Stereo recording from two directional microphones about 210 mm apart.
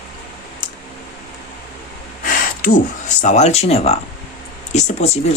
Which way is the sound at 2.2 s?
40° left (ahead or behind).